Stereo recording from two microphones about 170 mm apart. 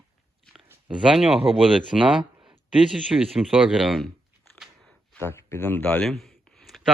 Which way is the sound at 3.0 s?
5° right (ahead or behind).